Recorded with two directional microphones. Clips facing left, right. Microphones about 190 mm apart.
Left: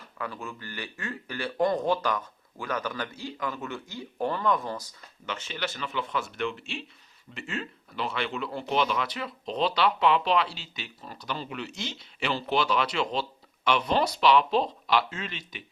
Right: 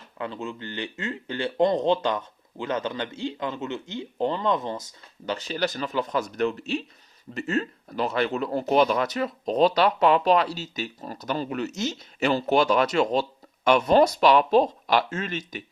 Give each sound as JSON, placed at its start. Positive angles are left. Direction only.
{"t": 0.2, "sound": "speech", "side_deg": -25}
{"t": 5.2, "sound": "a man's voice", "side_deg": -35}